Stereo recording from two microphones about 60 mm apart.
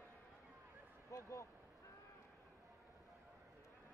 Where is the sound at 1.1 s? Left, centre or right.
Left.